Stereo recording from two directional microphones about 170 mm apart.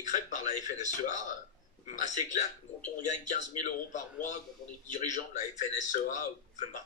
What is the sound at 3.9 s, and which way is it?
Speech, 50° left (ahead or behind).